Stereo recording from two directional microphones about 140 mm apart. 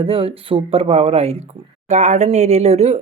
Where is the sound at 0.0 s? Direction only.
40° right (ahead or behind).